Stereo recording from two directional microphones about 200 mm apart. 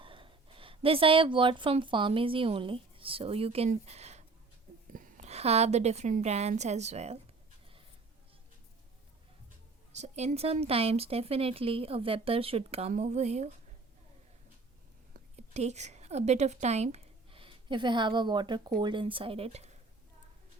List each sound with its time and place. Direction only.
0.0 s a woman's voice: 25° right (ahead or behind)
9.9 s speech: 35° right (ahead or behind)
15.1 s a woman's voice: 35° right (ahead or behind)